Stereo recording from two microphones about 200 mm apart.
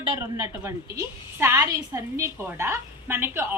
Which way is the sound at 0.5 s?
10° right (ahead or behind).